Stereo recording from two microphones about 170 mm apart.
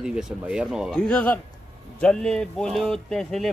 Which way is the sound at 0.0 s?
5° right (ahead or behind).